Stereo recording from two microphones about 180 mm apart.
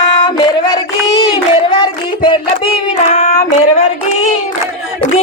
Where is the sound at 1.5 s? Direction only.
25° left (ahead or behind).